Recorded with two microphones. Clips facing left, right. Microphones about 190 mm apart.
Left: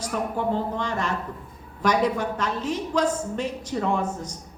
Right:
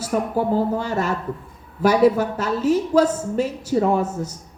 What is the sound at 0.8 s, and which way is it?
A woman's voice, 5° right (ahead or behind).